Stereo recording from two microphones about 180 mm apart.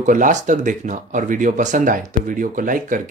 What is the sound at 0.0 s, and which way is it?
Speech, 45° right (ahead or behind).